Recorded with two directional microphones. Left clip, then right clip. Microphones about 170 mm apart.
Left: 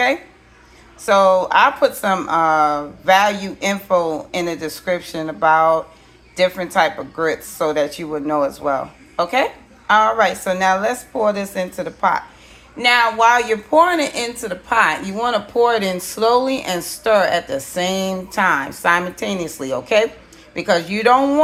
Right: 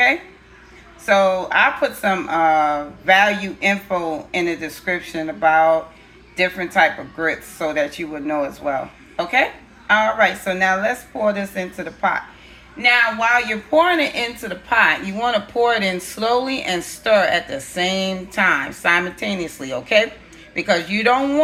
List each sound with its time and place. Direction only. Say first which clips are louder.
1.0 s a woman's voice: left 3 dB; 15° left (ahead or behind)